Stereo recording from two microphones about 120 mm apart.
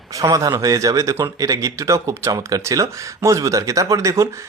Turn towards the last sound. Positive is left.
turn(degrees=-25)  # may be behind; listen again after turning